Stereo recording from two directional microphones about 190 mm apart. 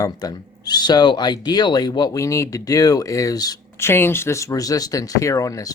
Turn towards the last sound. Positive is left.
turn(degrees=15)  # may be behind; listen again after turning